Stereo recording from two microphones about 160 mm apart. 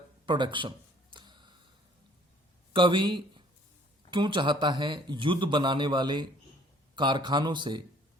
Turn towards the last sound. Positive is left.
turn(degrees=-30)  # may be behind; listen again after turning